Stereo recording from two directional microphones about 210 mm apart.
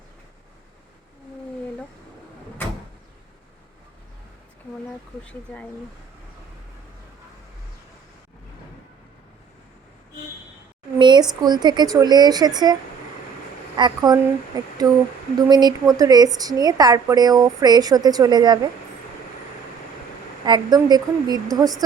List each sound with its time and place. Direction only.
5.2 s speech: 5° left (ahead or behind)
10.9 s a woman's voice: 20° right (ahead or behind)
13.7 s a woman's voice: 20° right (ahead or behind)
20.4 s a woman's voice: 20° right (ahead or behind)